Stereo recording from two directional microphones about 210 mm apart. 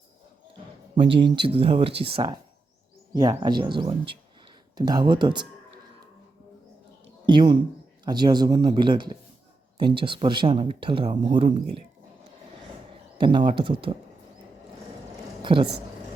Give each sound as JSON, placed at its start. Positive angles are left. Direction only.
{"t": 0.9, "sound": "speech", "side_deg": -25}
{"t": 7.3, "sound": "speech", "side_deg": -20}
{"t": 13.1, "sound": "speech", "side_deg": -25}
{"t": 15.4, "sound": "a sound", "side_deg": -25}